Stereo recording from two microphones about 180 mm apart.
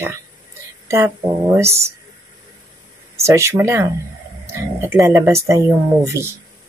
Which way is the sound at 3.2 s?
15° right (ahead or behind).